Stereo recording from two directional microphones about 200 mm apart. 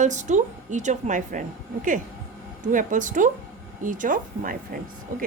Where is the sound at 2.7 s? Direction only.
40° right (ahead or behind).